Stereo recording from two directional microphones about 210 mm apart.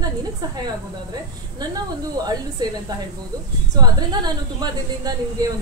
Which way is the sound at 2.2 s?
20° right (ahead or behind).